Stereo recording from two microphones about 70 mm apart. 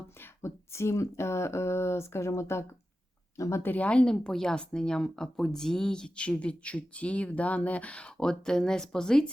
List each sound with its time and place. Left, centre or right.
0.2 s speech: left
3.6 s a woman's voice: left
3.8 s speech: centre